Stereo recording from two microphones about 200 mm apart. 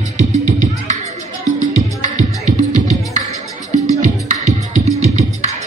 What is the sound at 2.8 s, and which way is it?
Music, 15° left (ahead or behind).